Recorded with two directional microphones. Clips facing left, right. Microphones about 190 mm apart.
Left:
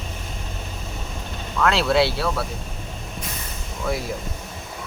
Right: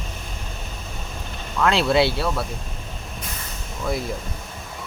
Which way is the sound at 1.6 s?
Centre (ahead or behind).